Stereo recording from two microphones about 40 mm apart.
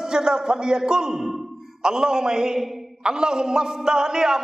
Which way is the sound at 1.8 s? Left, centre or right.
Centre.